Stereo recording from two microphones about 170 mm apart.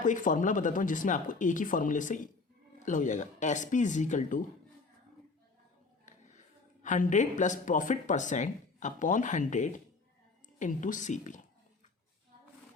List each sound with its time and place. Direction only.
0.0 s speech: 50° left (ahead or behind)
6.8 s speech: 50° left (ahead or behind)